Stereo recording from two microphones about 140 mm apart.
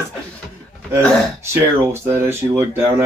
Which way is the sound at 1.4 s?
20° right (ahead or behind).